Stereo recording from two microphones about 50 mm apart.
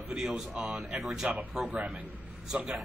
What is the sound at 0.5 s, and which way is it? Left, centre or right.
Speech, right.